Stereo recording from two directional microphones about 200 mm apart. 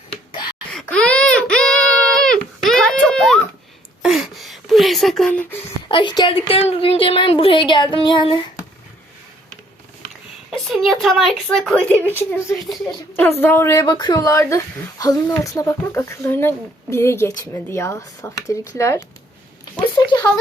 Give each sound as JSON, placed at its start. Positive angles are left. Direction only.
{"t": 0.7, "sound": "a sound", "side_deg": 5}
{"t": 5.9, "sound": "a woman's voice", "side_deg": 25}
{"t": 10.5, "sound": "a woman's voice", "side_deg": 0}